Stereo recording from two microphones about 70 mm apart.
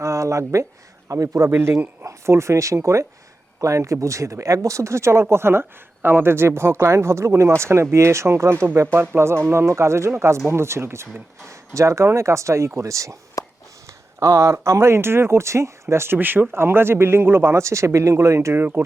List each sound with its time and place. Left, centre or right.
0.0 s speech: right
1.5 s speech: right
13.4 s a sound: left
14.2 s speech: right
16.1 s speech: right
18.5 s speech: right